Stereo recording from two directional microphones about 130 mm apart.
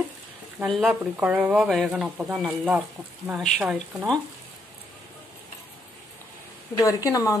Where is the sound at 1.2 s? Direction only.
10° right (ahead or behind).